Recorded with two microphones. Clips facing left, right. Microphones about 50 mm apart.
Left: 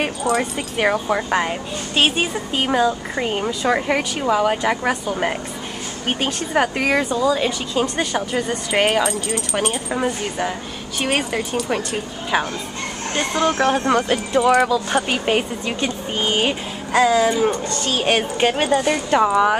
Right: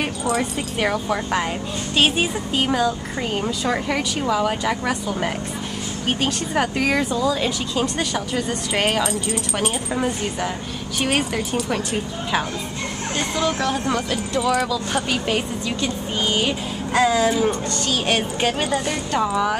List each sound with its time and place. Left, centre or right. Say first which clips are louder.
0.4 s speech: left 2 dB; centre
9.3 s speech: left 2 dB; centre
9.8 s speech: left 1 dB; centre
13.3 s speech: left 5 dB; left
16.9 s speech: left 2 dB; centre
18.6 s speech: left 5 dB; left